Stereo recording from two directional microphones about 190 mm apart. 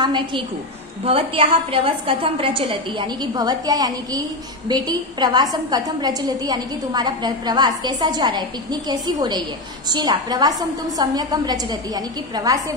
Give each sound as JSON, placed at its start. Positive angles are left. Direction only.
{"t": 0.0, "sound": "a woman's voice", "side_deg": -25}